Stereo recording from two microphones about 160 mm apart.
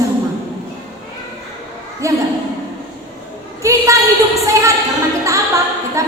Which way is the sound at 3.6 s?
20° right (ahead or behind).